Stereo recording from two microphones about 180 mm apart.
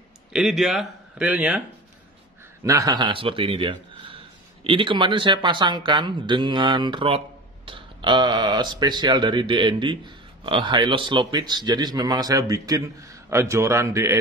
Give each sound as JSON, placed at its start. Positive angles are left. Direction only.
{"t": 0.3, "sound": "a man's voice", "side_deg": 0}
{"t": 2.6, "sound": "a man's voice", "side_deg": -20}